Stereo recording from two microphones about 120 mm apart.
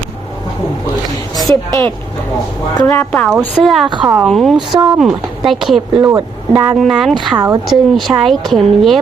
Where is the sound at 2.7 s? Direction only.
35° left (ahead or behind).